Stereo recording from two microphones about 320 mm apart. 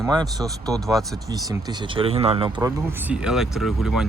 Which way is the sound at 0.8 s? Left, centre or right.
Centre.